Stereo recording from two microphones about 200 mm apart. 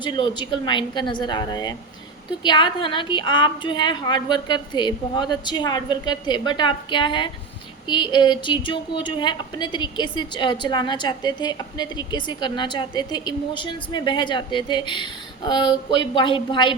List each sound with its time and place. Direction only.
0.0 s a woman's voice: 25° left (ahead or behind)